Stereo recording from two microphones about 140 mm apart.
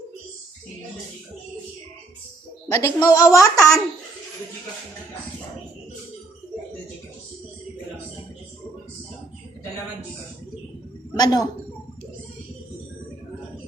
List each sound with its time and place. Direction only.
2.6 s a woman's voice: 20° left (ahead or behind)
11.1 s a woman's voice: 30° left (ahead or behind)